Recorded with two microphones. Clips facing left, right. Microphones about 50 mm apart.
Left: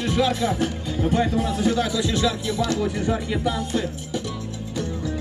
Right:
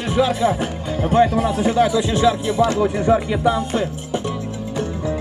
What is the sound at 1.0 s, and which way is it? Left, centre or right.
Speech, right.